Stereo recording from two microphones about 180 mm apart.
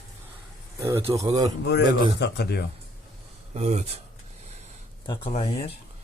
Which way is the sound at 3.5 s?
35° right (ahead or behind).